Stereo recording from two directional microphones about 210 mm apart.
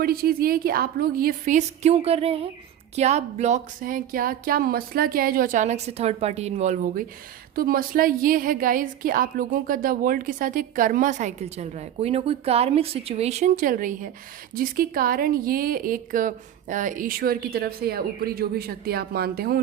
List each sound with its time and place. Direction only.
0.0 s a woman's voice: 45° right (ahead or behind)